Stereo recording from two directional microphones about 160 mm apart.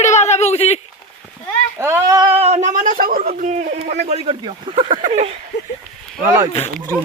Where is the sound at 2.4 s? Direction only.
45° right (ahead or behind); by 3.2 s 65° right (ahead or behind).